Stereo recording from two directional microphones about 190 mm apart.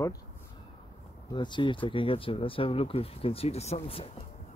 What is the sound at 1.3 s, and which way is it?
Speech, 25° left (ahead or behind).